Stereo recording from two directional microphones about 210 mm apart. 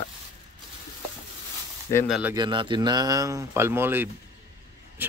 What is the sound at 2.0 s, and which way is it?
Speech, centre (ahead or behind).